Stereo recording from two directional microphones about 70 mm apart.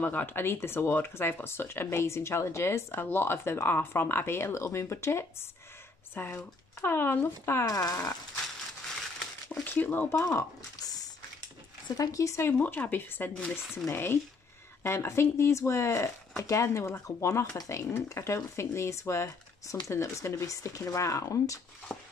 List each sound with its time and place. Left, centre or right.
0.0 s speech: left
7.6 s fart: left
9.5 s speech: left
10.0 s speech: left
10.8 s a sound: left
12.0 s speech: left
12.4 s speech: left
21.9 s a sound: centre